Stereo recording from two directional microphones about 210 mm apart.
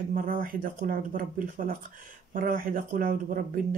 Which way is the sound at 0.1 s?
40° right (ahead or behind).